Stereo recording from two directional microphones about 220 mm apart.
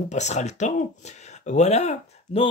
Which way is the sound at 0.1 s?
30° left (ahead or behind).